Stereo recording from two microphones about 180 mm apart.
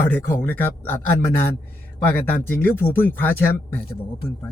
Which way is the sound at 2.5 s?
10° left (ahead or behind).